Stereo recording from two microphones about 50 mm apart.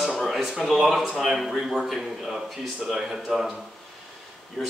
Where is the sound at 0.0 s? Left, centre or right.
Centre.